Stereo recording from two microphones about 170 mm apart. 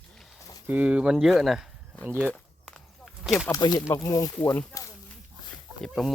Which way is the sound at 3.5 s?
20° left (ahead or behind).